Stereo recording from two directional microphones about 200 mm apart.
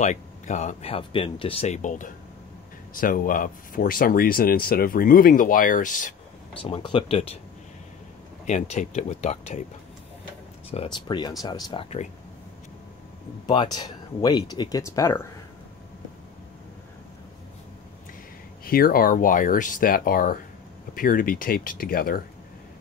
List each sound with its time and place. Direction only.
0.0 s speech: 35° left (ahead or behind)
6.6 s speech: 25° left (ahead or behind)
8.5 s speech: 35° left (ahead or behind)
10.7 s speech: 25° left (ahead or behind)
13.5 s speech: 20° left (ahead or behind)
18.6 s speech: 45° left (ahead or behind)